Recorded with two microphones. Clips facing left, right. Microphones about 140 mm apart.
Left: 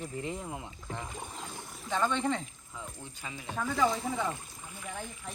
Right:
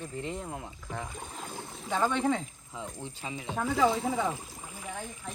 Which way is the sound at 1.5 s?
20° right (ahead or behind).